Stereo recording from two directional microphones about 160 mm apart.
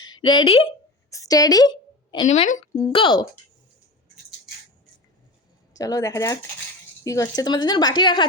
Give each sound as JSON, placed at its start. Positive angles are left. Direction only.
{"t": 0.1, "sound": "speech", "side_deg": 30}
{"t": 1.1, "sound": "a sound", "side_deg": 20}
{"t": 2.2, "sound": "a woman's voice", "side_deg": 45}
{"t": 2.9, "sound": "speech", "side_deg": 30}
{"t": 5.7, "sound": "speech", "side_deg": 20}